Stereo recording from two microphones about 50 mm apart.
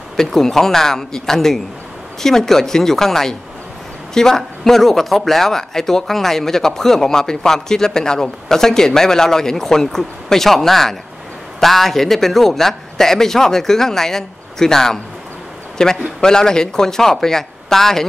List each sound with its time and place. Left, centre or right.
0.2 s speech: centre